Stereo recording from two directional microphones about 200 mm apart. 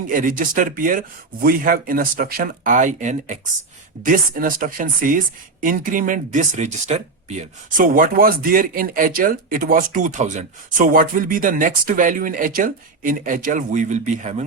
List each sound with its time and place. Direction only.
0.1 s speech: 45° right (ahead or behind)